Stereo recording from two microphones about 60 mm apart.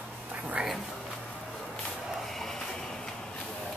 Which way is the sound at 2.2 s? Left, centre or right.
Centre.